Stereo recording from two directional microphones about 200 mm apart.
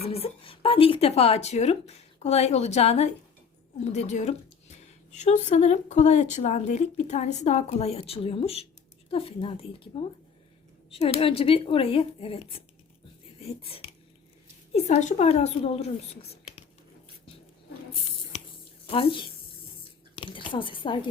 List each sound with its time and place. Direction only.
0.1 s a woman's voice: 30° left (ahead or behind)
18.9 s a woman's voice: 25° left (ahead or behind)